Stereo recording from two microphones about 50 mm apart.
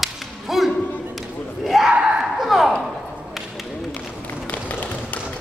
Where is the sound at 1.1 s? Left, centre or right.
Centre.